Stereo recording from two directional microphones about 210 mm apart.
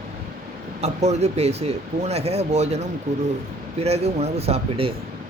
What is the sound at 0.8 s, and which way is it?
Speech, 30° right (ahead or behind).